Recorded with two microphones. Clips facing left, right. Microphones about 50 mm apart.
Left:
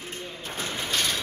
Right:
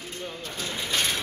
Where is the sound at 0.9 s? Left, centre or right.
Centre.